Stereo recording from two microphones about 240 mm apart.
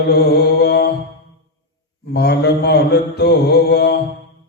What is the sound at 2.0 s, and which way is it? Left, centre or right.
Mantra, left.